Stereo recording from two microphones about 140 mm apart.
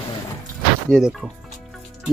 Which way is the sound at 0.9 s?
5° right (ahead or behind).